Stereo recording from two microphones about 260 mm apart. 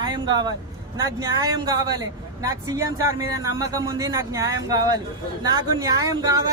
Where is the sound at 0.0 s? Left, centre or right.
Centre.